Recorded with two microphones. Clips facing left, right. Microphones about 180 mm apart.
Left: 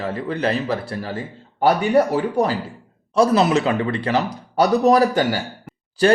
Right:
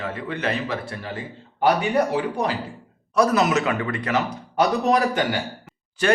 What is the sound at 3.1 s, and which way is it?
A man's voice, 30° left (ahead or behind).